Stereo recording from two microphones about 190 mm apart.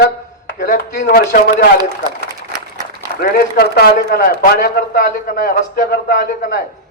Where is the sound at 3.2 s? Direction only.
55° left (ahead or behind).